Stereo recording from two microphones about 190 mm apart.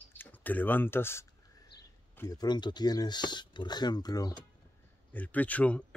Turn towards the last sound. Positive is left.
turn(degrees=5)  # may be behind; listen again after turning